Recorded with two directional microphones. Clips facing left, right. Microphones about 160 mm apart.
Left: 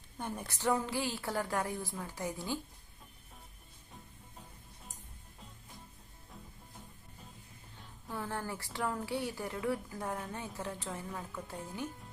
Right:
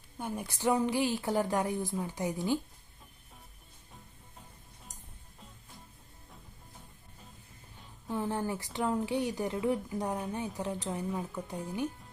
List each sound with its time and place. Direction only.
0.2 s a woman's voice: 10° right (ahead or behind)
8.0 s speech: 20° right (ahead or behind)